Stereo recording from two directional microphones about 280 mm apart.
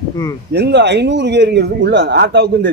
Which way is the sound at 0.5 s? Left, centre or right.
Right.